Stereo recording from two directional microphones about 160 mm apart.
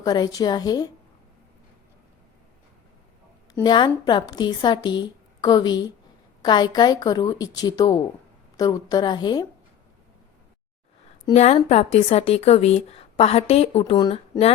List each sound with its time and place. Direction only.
0.0 s a woman's voice: 25° left (ahead or behind)
3.5 s a woman's voice: 25° left (ahead or behind)
11.3 s speech: 45° left (ahead or behind)